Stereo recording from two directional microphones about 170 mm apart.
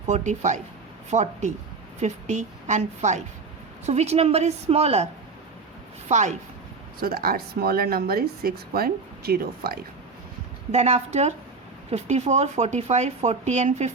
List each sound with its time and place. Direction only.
0.1 s a woman's voice: 45° right (ahead or behind)
6.1 s a woman's voice: 45° right (ahead or behind)
7.0 s a woman's voice: 60° right (ahead or behind)
10.7 s speech: 40° right (ahead or behind)